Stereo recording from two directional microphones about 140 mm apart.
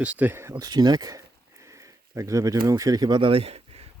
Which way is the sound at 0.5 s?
30° right (ahead or behind).